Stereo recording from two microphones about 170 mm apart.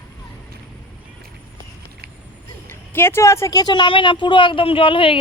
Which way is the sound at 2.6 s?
15° left (ahead or behind).